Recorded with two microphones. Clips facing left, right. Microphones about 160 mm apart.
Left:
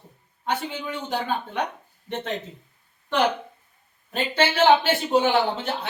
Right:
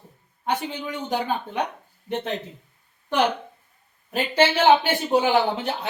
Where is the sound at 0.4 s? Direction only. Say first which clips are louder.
Right 1 dB; 15° right (ahead or behind).